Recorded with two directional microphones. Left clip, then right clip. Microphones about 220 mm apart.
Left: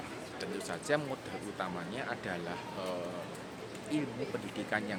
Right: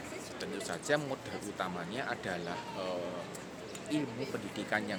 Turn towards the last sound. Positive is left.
turn(degrees=-15)  # may be behind; listen again after turning